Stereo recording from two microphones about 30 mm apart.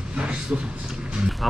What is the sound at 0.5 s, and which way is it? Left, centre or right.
Speech, right.